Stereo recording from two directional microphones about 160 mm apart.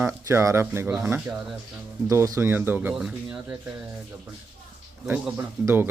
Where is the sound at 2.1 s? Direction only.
20° right (ahead or behind).